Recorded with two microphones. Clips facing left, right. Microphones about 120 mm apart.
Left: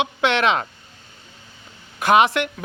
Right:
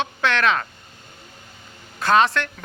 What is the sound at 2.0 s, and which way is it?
Speech, 15° left (ahead or behind).